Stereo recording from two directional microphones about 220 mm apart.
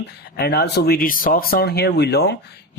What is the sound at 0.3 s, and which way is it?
Speech, 45° left (ahead or behind).